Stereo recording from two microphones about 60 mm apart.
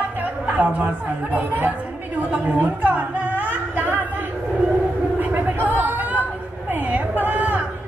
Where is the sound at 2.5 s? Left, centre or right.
Right.